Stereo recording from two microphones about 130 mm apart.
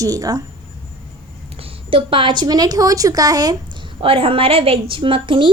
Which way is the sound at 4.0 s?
45° right (ahead or behind).